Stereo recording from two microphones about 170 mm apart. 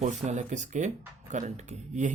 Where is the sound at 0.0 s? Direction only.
45° right (ahead or behind).